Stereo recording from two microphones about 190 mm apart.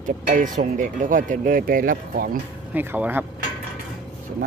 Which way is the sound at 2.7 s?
10° right (ahead or behind).